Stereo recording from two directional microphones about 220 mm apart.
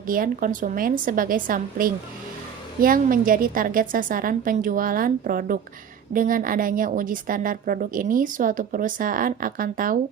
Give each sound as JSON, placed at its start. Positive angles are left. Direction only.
{"t": 0.1, "sound": "a woman's voice", "side_deg": -40}